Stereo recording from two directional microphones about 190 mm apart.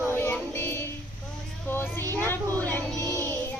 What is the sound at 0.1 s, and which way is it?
Music, 10° left (ahead or behind).